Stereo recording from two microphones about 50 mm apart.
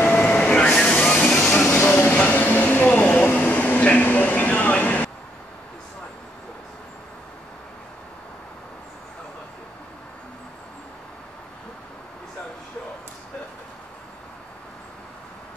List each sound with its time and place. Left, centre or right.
0.1 s vehicle: left
1.0 s train: left
1.4 s music: centre
1.7 s train: left
2.1 s a sound: left